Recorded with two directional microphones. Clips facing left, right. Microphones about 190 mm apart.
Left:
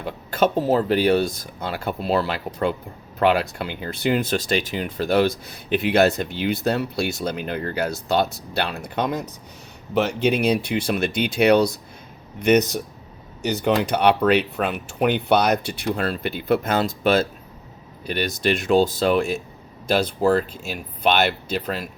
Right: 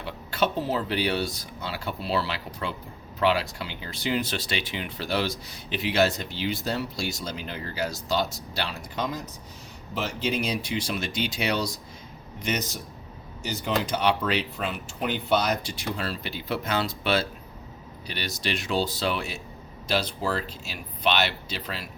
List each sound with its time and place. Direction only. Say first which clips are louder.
0.0 s speech: left 6 dB; 45° left (ahead or behind)